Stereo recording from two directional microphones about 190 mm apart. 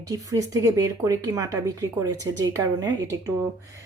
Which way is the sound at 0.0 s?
20° right (ahead or behind).